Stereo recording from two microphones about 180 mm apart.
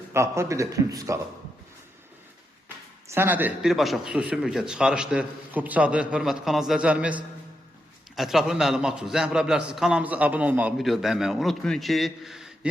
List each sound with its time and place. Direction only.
0.1 s a man's voice: 15° right (ahead or behind)
3.1 s a man's voice: 10° right (ahead or behind)